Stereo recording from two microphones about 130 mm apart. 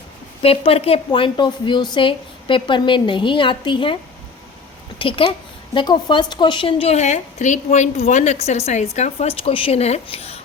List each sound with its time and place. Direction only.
0.4 s a woman's voice: 50° left (ahead or behind)
4.9 s a woman's voice: 40° left (ahead or behind)